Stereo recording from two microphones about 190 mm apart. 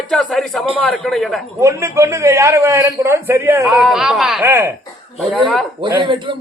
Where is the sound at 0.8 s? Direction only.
5° left (ahead or behind).